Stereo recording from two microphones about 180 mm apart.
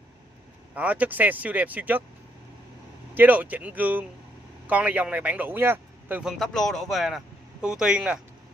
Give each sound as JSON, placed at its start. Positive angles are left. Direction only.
{"t": 0.7, "sound": "speech", "side_deg": -10}
{"t": 3.2, "sound": "a man's voice", "side_deg": -10}